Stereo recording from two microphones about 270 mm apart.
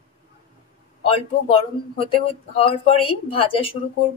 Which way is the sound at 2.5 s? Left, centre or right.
Centre.